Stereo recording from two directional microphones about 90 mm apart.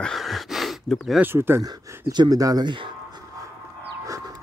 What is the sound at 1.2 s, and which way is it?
Speech, 25° right (ahead or behind).